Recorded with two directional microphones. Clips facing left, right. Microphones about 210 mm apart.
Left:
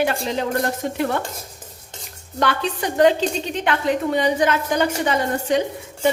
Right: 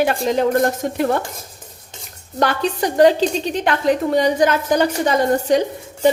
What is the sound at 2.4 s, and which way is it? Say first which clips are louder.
A woman's voice: right 3 dB; 40° right (ahead or behind).